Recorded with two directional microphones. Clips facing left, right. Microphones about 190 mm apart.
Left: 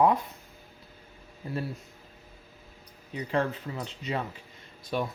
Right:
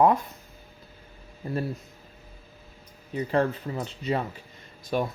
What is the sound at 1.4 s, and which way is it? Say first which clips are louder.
Speech: right 4 dB; 45° right (ahead or behind).